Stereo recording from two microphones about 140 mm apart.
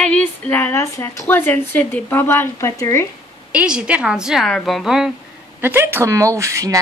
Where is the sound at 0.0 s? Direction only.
10° left (ahead or behind).